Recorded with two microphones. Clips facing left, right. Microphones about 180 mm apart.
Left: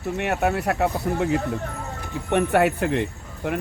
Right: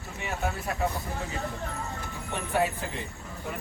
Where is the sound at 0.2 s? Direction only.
70° left (ahead or behind).